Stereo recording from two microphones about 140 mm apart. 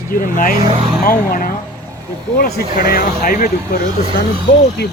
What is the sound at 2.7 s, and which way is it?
Speech, 90° left.